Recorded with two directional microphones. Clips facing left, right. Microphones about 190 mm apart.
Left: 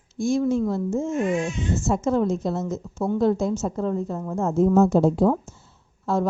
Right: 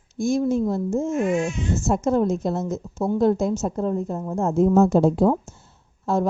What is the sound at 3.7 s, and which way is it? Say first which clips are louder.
Speech: right 1 dB; 40° right (ahead or behind).